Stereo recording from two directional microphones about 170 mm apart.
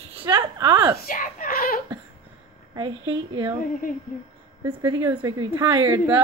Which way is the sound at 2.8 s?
30° right (ahead or behind).